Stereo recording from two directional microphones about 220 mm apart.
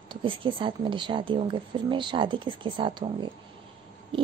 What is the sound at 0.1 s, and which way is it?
Speech, 25° right (ahead or behind).